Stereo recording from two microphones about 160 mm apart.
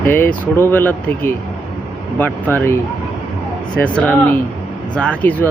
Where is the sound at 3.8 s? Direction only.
10° left (ahead or behind).